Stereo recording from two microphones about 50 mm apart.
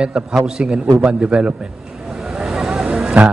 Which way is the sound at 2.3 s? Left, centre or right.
Centre.